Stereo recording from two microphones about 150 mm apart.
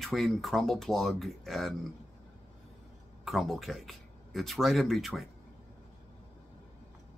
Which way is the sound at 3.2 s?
Centre (ahead or behind).